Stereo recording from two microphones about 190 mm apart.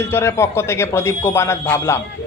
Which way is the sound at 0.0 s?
15° left (ahead or behind).